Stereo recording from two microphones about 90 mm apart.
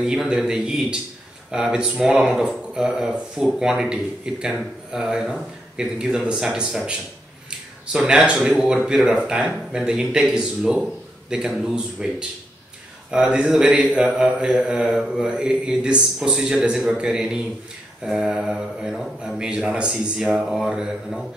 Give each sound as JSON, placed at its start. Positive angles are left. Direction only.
{"t": 0.0, "sound": "speech", "side_deg": -10}